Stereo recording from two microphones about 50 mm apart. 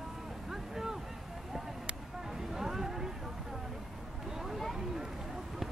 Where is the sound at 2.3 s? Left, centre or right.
Centre.